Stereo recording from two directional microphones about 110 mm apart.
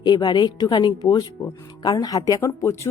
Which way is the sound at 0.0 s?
40° left (ahead or behind).